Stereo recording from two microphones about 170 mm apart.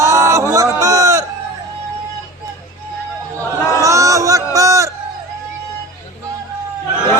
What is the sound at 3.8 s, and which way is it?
Music, 20° right (ahead or behind).